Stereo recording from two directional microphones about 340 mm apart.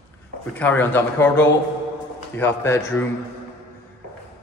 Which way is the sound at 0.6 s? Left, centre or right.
Centre.